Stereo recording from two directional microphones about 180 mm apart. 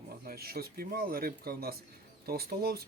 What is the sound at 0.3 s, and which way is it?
Speech, 55° right (ahead or behind).